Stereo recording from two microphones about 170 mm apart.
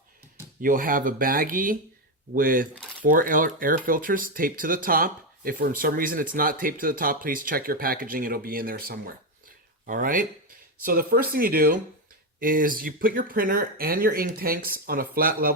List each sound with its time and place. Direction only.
0.6 s speech: 55° right (ahead or behind)